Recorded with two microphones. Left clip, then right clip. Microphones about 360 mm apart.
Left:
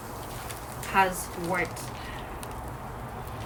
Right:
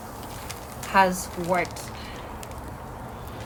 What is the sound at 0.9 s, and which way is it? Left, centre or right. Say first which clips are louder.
Speech: right 4 dB; centre.